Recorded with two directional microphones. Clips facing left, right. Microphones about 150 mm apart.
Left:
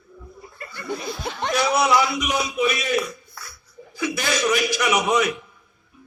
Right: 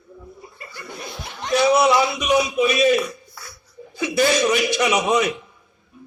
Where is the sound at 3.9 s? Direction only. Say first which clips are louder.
Right 6 dB; 25° right (ahead or behind).